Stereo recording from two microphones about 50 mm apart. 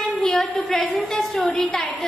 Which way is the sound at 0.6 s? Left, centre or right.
Centre.